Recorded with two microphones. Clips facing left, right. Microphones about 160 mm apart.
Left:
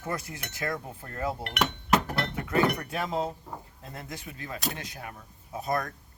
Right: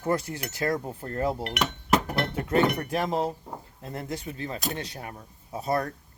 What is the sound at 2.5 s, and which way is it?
Speech, 35° right (ahead or behind).